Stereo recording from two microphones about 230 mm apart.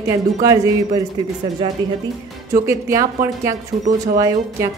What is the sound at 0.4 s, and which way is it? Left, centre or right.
Speech, centre.